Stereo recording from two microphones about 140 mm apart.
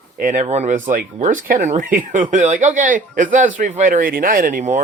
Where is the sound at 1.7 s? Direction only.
70° right (ahead or behind).